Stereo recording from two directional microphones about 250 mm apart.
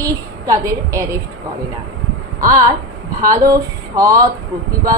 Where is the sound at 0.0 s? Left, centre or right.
Centre.